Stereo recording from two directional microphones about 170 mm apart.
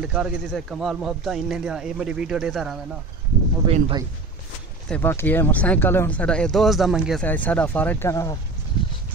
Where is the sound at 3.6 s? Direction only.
35° right (ahead or behind).